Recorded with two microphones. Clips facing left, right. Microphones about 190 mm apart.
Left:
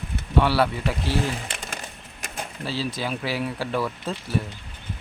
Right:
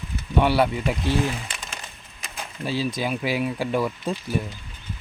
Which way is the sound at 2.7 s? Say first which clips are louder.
Right 3 dB; 15° right (ahead or behind).